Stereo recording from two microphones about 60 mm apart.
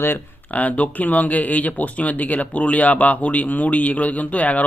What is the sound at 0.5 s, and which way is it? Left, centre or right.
Speech, left.